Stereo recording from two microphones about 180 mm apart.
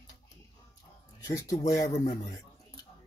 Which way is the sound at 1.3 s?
20° left (ahead or behind).